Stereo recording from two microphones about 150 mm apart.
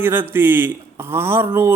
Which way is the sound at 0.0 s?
15° right (ahead or behind).